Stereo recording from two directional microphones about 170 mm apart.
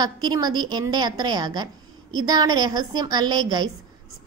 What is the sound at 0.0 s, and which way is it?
A woman's voice, 25° right (ahead or behind).